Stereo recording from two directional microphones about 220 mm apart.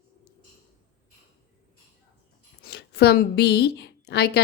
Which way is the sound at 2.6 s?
50° left (ahead or behind).